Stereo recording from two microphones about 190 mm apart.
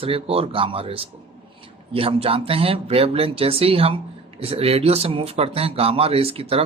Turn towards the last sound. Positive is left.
turn(degrees=-30)  # may be behind; listen again after turning